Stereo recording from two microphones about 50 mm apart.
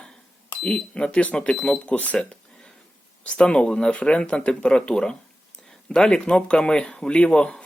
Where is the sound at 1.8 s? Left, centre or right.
Left.